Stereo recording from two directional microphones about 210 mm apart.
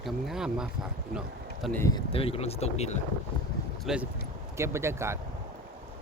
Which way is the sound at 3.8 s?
5° right (ahead or behind).